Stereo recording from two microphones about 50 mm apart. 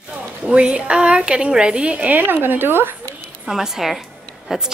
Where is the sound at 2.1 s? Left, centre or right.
Right.